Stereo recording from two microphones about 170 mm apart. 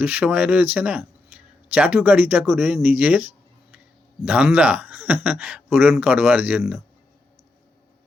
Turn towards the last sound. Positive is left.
turn(degrees=-5)  # may be behind; listen again after turning